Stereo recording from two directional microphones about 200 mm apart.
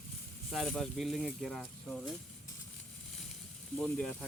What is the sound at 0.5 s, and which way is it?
Speech, centre (ahead or behind).